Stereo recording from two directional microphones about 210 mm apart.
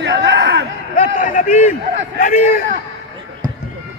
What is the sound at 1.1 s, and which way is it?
A man's voice, 40° left (ahead or behind).